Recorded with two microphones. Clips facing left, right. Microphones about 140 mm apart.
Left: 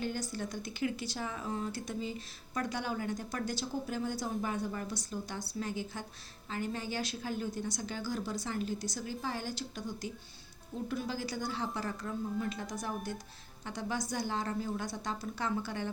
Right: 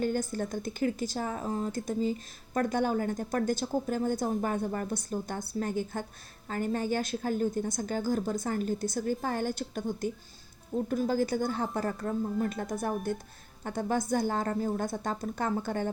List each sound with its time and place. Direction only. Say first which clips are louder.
0.0 s speech: right 7 dB; 50° right (ahead or behind)